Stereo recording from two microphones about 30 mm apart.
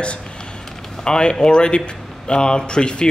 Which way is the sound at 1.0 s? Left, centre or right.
Left.